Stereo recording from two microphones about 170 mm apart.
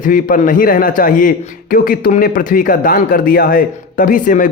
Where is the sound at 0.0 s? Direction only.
55° left (ahead or behind).